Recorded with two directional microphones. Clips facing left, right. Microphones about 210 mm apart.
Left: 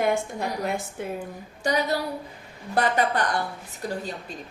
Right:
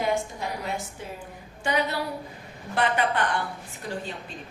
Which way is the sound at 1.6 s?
40° left (ahead or behind).